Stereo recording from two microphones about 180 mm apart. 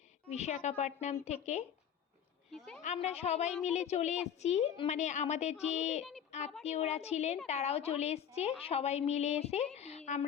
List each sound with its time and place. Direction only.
0.3 s a woman's voice: 40° left (ahead or behind)
2.5 s a woman's voice: centre (ahead or behind)
2.8 s a woman's voice: 40° left (ahead or behind)
9.7 s a sound: 35° left (ahead or behind)